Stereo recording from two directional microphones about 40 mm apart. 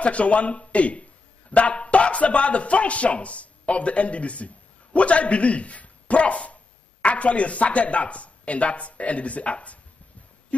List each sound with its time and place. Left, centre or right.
0.0 s speech: left